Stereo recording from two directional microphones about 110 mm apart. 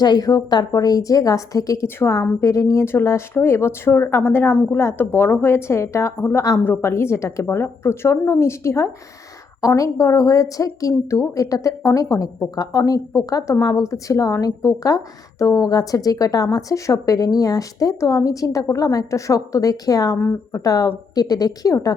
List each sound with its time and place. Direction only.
0.0 s a woman's voice: 40° left (ahead or behind)
6.6 s a woman's voice: 20° left (ahead or behind)
20.1 s speech: 15° left (ahead or behind)
20.5 s speech: 30° left (ahead or behind)